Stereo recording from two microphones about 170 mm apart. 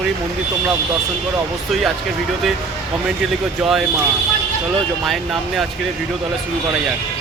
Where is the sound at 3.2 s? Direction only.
Centre (ahead or behind).